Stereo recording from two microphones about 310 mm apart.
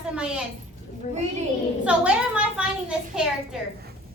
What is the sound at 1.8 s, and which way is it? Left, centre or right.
Speech, centre.